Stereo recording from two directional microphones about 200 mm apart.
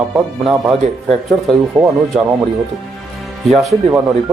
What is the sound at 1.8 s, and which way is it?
Speech, 15° right (ahead or behind).